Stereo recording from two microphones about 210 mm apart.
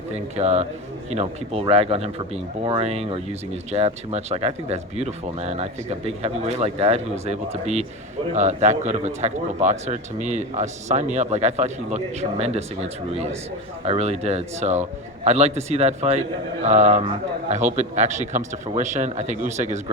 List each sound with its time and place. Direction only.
0.1 s speech: 30° right (ahead or behind)